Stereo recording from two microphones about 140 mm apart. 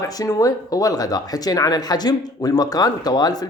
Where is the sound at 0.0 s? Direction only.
25° left (ahead or behind).